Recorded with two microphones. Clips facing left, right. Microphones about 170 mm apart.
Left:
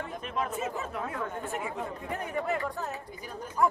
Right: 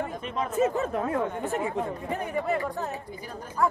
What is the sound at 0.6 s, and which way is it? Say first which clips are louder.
Speech: right 9 dB; 40° right (ahead or behind).